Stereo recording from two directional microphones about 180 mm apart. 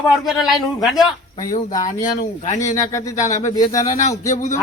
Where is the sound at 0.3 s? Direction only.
Centre (ahead or behind).